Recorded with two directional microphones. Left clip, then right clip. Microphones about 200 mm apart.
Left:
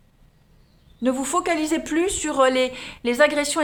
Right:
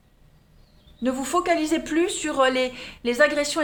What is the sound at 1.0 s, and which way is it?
Speech, 25° left (ahead or behind).